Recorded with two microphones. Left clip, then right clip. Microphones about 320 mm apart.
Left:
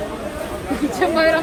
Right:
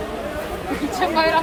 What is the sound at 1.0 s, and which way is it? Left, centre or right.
Speech, centre.